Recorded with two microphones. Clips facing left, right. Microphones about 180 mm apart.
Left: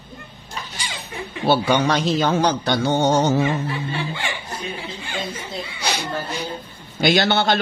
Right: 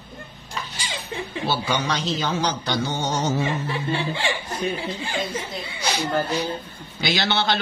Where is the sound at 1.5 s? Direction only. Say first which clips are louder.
Left 8 dB; 55° left (ahead or behind).